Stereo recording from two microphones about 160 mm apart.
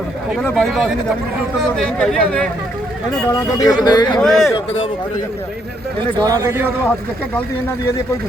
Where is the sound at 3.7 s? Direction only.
25° left (ahead or behind).